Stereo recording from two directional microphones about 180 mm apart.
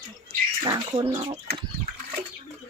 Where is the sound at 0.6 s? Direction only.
30° right (ahead or behind).